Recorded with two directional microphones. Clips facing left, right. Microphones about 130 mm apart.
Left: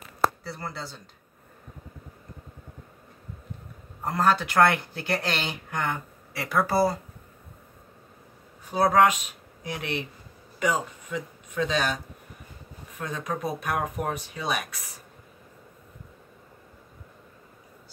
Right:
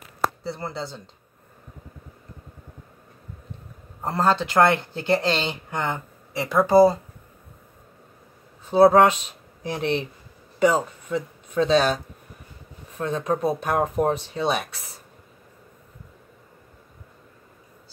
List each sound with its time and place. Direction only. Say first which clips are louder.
0.4 s speech: right 5 dB; 25° right (ahead or behind)
4.0 s speech: right 2 dB; 30° right (ahead or behind)
8.6 s speech: right 6 dB; 25° right (ahead or behind)